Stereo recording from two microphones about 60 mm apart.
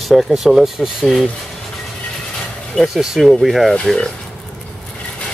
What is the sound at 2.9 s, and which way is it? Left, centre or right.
Speech, centre.